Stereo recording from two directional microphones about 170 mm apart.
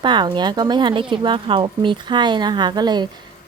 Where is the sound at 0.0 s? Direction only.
25° right (ahead or behind).